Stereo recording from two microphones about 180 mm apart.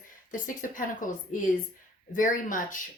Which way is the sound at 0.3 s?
45° left (ahead or behind).